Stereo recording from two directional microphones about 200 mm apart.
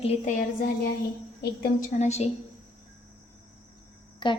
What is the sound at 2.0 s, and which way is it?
Speech, 35° left (ahead or behind).